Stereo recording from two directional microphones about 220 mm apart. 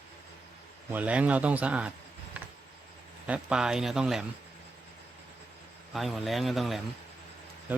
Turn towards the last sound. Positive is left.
turn(degrees=0)  # may be behind; listen again after turning